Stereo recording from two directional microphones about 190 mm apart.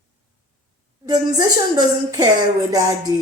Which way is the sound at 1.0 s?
20° right (ahead or behind).